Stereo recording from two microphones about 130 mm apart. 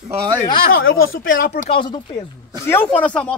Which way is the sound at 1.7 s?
40° left (ahead or behind).